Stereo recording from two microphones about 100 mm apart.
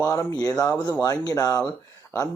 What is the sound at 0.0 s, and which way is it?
Speech, 35° left (ahead or behind).